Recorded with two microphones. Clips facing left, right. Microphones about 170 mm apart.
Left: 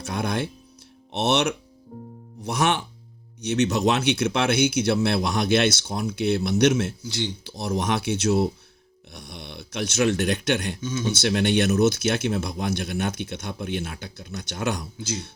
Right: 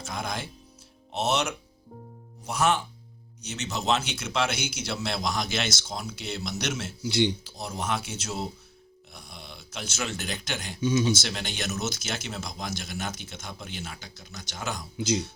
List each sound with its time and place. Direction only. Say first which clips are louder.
1.1 s speech: left 5 dB; 65° left (ahead or behind)
7.0 s speech: right 5 dB; 15° right (ahead or behind)
7.4 s speech: left 7 dB; 70° left (ahead or behind)
10.8 s speech: right 3 dB; 15° right (ahead or behind)
11.1 s speech: left 9 dB; 60° left (ahead or behind)
14.9 s speech: right 5 dB; 15° right (ahead or behind)